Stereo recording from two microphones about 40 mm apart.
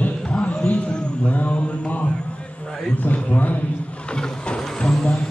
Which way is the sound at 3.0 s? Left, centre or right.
Left.